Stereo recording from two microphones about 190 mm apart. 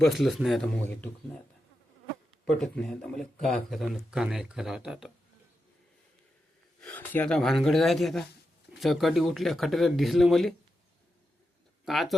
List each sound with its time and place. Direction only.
0.0 s speech: centre (ahead or behind)
2.4 s speech: 5° left (ahead or behind)
6.8 s speech: 10° left (ahead or behind)
11.9 s speech: centre (ahead or behind)